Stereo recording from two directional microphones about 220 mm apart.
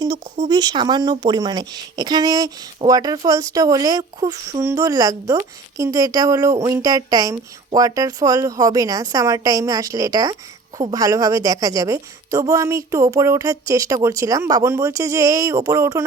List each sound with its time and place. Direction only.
0.4 s a woman's voice: 20° right (ahead or behind)